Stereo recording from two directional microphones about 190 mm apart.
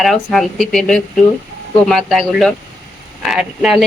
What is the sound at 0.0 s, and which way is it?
Speech, centre (ahead or behind).